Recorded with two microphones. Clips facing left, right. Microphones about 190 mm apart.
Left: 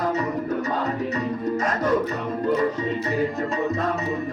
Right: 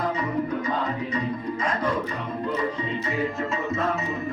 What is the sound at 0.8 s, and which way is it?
Music, 45° left (ahead or behind).